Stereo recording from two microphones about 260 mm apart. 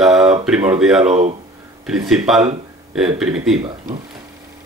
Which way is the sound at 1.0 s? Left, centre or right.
Right.